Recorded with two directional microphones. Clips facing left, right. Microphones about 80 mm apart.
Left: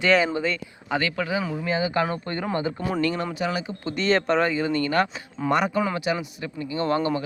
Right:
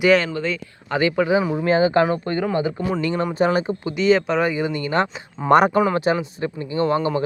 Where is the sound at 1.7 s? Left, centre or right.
Right.